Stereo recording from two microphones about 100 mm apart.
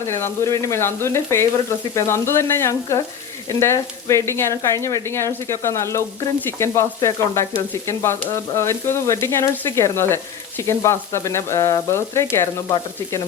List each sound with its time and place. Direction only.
0.1 s frying: 30° left (ahead or behind)